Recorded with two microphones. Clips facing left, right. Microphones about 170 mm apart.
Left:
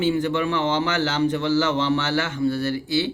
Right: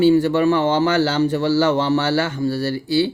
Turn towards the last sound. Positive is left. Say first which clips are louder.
# right 4 dB
turn(degrees=-35)  # may be behind; listen again after turning